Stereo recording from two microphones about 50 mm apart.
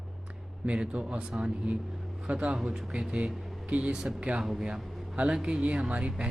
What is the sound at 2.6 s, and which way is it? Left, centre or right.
Speech, centre.